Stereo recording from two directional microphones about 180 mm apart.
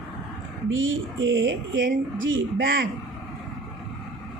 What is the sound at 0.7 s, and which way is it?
Speech, 90° right.